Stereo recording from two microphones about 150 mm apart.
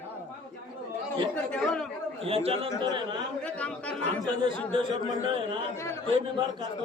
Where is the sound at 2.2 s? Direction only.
40° right (ahead or behind).